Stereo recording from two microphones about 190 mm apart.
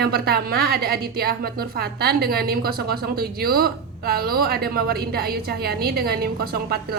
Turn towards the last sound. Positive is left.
turn(degrees=-55)  # may be behind; listen again after turning